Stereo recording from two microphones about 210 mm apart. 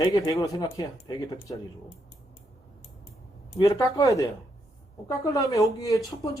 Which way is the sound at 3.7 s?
15° left (ahead or behind).